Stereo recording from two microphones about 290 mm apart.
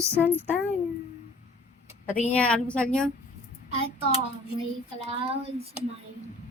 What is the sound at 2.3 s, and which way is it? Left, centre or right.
Speech, centre.